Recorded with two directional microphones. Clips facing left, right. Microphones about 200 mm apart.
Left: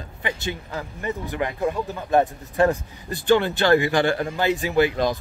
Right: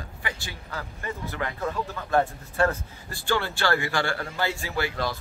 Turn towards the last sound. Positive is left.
turn(degrees=20)  # may be behind; listen again after turning